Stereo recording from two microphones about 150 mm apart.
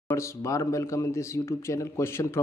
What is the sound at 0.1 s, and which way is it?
A man's voice, 20° left (ahead or behind).